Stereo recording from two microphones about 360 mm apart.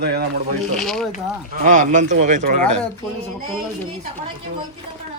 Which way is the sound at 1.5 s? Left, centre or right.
Right.